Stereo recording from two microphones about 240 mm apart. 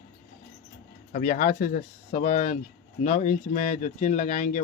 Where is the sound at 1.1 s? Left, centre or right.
Left.